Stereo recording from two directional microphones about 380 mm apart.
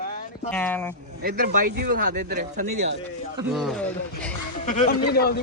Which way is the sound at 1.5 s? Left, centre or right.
Right.